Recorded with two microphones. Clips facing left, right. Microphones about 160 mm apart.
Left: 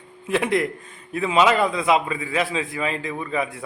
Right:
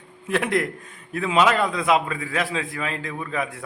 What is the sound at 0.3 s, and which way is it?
A man's voice, centre (ahead or behind).